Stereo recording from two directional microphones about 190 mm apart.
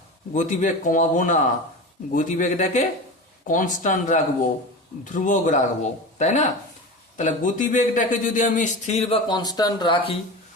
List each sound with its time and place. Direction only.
0.3 s a man's voice: 45° left (ahead or behind); by 10.2 s 25° left (ahead or behind)